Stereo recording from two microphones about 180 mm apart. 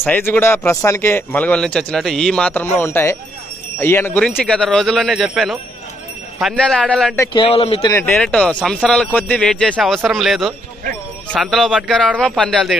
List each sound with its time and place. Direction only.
0.0 s speech: 10° left (ahead or behind)
7.3 s speech: 30° left (ahead or behind)
7.8 s speech: 15° left (ahead or behind)